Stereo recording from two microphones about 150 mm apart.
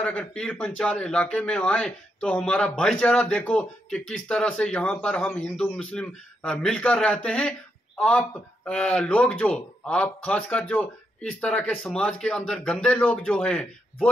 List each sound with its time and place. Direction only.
0.0 s speech: 10° left (ahead or behind)